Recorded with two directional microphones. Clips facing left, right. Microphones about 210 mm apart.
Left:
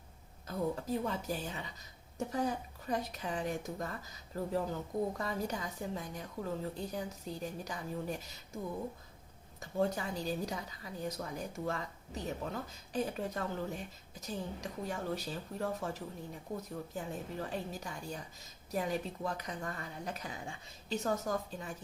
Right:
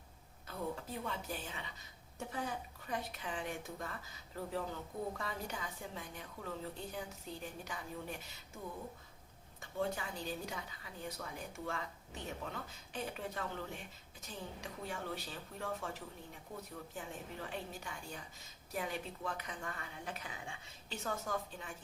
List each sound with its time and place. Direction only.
0.4 s a woman's voice: 40° left (ahead or behind)
9.6 s a woman's voice: 40° left (ahead or behind)